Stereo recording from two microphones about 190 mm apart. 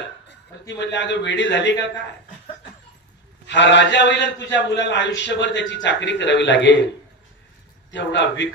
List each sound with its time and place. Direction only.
0.3 s a man's voice: 65° left (ahead or behind)
3.4 s a man's voice: 65° left (ahead or behind)
7.9 s a man's voice: 70° left (ahead or behind)